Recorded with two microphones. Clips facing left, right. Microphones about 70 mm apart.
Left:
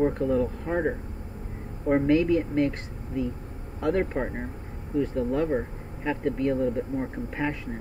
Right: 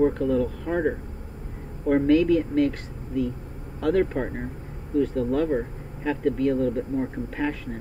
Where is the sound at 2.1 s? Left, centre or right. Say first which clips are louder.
Right 4 dB; centre.